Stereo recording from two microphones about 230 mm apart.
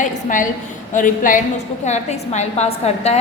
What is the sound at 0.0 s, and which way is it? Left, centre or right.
A woman's voice, left.